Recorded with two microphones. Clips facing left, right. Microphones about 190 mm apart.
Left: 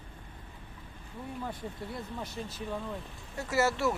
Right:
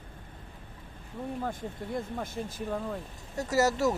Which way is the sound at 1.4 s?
50° right (ahead or behind).